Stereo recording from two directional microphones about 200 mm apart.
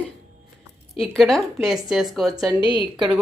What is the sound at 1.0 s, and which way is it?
Speech, centre (ahead or behind).